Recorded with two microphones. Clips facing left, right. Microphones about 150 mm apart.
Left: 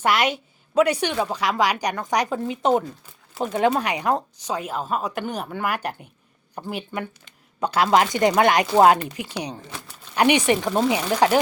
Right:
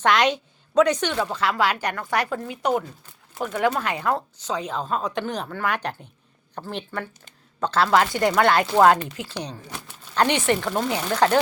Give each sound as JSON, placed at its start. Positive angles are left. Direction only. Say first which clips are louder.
{"t": 0.0, "sound": "a woman's voice", "louder": "right 1 dB", "side_deg": 5}